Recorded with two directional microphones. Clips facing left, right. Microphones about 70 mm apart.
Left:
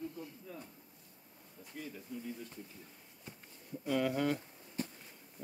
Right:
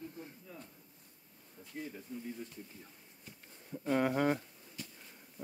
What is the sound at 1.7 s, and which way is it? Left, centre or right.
Speech, right.